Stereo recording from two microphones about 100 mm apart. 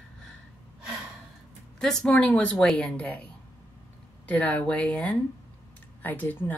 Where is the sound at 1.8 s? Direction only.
5° left (ahead or behind).